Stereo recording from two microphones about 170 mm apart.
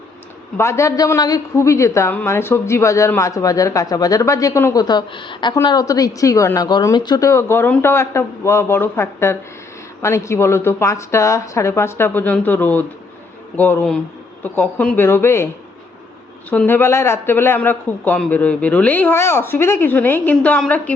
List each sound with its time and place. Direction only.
0.5 s a woman's voice: 15° left (ahead or behind)
16.5 s a woman's voice: 10° left (ahead or behind)